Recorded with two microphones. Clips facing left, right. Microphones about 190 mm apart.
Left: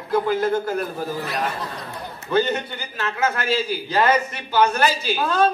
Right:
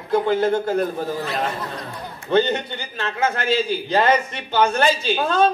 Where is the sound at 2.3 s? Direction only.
30° right (ahead or behind).